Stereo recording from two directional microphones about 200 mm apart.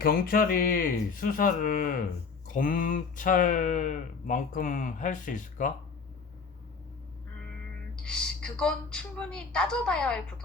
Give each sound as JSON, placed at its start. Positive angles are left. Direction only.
{"t": 0.0, "sound": "speech", "side_deg": 45}
{"t": 7.9, "sound": "speech", "side_deg": 5}